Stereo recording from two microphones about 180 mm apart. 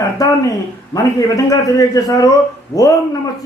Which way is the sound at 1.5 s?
20° left (ahead or behind).